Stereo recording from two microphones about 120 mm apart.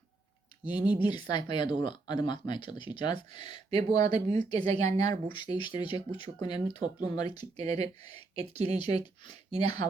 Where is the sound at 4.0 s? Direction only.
70° right (ahead or behind).